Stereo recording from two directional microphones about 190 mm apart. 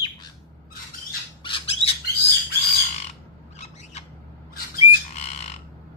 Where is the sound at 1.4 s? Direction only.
30° left (ahead or behind).